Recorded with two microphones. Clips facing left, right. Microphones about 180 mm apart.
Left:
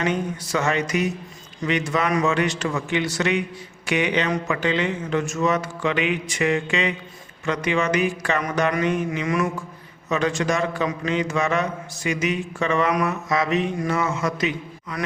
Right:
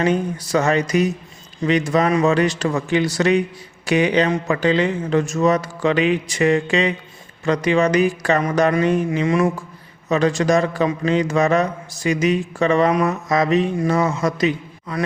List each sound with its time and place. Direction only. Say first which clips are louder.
0.0 s a man's voice: right 5 dB; 35° right (ahead or behind)